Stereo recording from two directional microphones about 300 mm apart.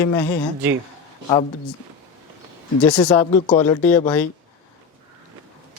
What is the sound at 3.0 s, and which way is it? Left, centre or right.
Speech, centre.